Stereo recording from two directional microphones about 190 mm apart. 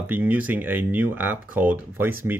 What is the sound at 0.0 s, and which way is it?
Speech, 10° right (ahead or behind).